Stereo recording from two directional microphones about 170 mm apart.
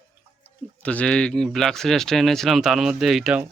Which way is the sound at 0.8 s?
10° left (ahead or behind).